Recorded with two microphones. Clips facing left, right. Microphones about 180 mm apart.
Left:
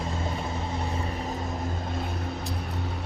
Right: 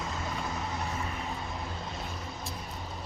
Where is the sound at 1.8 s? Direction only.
55° left (ahead or behind).